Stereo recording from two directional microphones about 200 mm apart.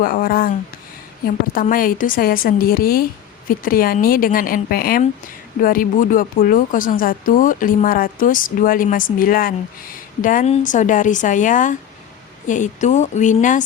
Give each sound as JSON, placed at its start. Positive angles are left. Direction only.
{"t": 0.0, "sound": "speech", "side_deg": 45}